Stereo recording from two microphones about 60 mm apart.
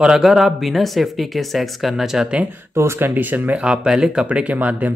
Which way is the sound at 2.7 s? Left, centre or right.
Right.